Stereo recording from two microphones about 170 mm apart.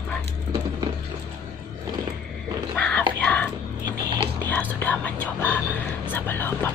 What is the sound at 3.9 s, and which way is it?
Music, 25° right (ahead or behind).